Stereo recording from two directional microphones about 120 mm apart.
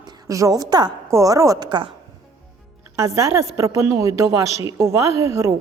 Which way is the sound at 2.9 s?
25° right (ahead or behind).